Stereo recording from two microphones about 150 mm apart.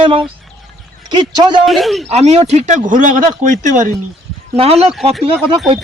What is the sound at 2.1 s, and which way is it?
Speech, 45° right (ahead or behind).